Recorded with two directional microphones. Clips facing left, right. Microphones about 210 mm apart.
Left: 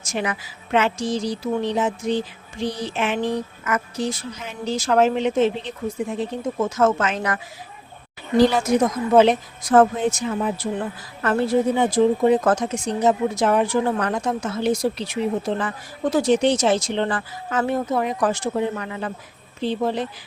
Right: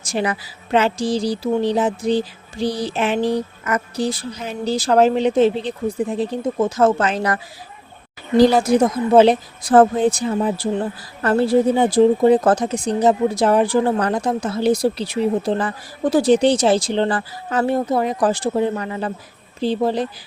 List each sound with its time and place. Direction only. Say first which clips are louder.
0.0 s speech: right 4 dB; 35° right (ahead or behind)
8.4 s speech: right 3 dB; 35° right (ahead or behind)